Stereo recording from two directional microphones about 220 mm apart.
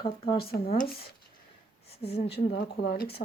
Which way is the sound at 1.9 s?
25° left (ahead or behind).